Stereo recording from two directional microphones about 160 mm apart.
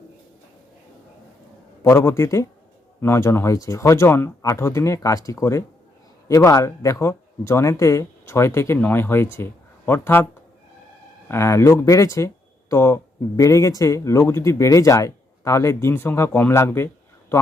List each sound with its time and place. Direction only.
1.8 s speech: 15° left (ahead or behind)
11.3 s speech: 15° left (ahead or behind)